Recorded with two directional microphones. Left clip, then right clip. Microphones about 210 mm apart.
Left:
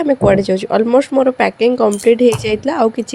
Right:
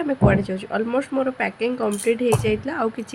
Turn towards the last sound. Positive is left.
turn(degrees=25)  # may be behind; listen again after turning